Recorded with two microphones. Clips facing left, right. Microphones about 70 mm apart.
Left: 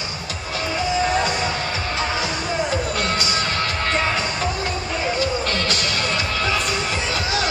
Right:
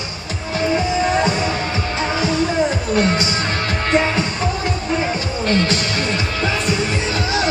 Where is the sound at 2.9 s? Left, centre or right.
Right.